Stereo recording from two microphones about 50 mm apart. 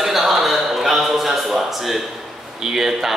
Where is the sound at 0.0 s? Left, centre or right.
Centre.